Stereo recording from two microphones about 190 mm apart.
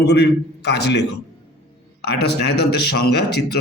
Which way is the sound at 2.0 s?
60° left (ahead or behind).